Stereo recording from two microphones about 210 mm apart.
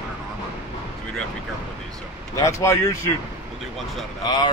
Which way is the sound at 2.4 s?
15° left (ahead or behind).